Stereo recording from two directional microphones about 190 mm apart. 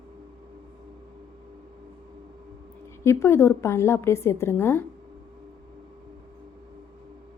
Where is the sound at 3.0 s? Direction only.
15° left (ahead or behind).